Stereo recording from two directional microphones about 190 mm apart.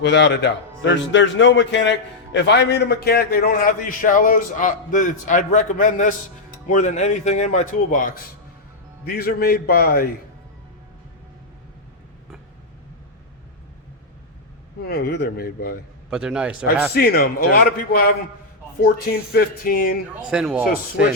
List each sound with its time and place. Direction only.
0.0 s a man's voice: 70° left (ahead or behind)
14.8 s speech: 60° left (ahead or behind)
16.0 s a man's voice: 5° right (ahead or behind)
16.9 s a man's voice: 55° left (ahead or behind)
20.3 s a man's voice: 5° right (ahead or behind)